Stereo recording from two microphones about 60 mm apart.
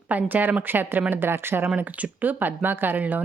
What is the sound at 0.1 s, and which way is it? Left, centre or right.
Speech, right.